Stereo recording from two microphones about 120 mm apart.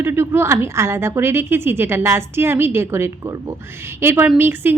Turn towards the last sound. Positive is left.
turn(degrees=-20)  # may be behind; listen again after turning